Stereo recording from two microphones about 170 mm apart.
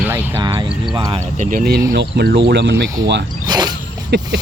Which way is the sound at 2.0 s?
80° right.